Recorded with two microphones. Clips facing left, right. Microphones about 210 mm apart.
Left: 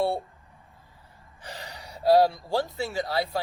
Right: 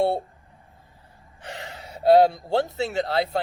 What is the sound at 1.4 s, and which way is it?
Speech, 20° right (ahead or behind).